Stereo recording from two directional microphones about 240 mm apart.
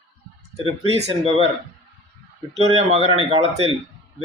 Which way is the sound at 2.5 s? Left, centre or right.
Right.